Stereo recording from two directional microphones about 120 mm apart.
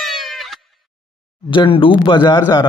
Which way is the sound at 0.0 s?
Centre (ahead or behind).